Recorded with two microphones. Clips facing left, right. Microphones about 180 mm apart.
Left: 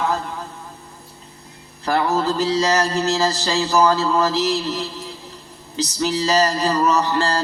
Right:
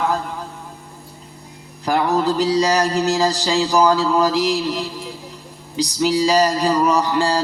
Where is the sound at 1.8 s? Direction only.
15° right (ahead or behind).